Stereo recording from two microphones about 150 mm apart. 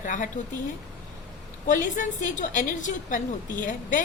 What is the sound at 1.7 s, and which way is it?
A woman's voice, 60° left (ahead or behind).